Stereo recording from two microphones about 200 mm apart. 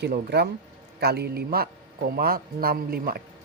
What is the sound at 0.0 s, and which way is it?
A man's voice, 55° right (ahead or behind).